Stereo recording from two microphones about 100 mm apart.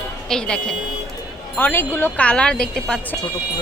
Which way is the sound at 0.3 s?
5° left (ahead or behind).